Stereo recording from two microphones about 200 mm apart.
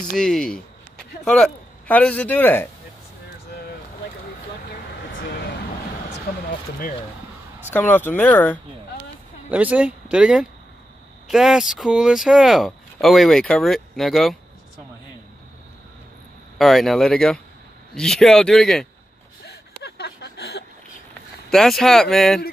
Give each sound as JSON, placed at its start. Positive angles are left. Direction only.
{"t": 0.1, "sound": "a man's voice", "side_deg": 0}
{"t": 7.7, "sound": "a man's voice", "side_deg": 10}
{"t": 9.5, "sound": "speech", "side_deg": -5}
{"t": 16.5, "sound": "speech", "side_deg": 0}
{"t": 19.4, "sound": "a sound", "side_deg": 55}
{"t": 21.5, "sound": "speech", "side_deg": 0}